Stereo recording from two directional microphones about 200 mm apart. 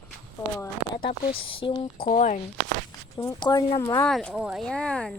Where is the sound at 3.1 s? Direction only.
20° left (ahead or behind).